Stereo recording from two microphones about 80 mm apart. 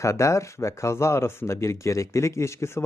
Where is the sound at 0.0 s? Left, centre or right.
Left.